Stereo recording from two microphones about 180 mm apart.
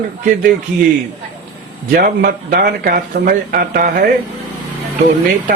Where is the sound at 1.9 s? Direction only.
55° right (ahead or behind).